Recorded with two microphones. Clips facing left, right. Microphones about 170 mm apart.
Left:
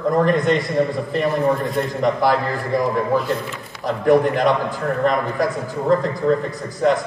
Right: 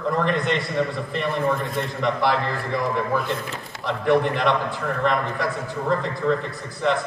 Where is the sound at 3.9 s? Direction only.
40° left (ahead or behind).